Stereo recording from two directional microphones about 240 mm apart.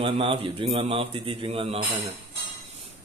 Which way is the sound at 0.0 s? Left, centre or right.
Right.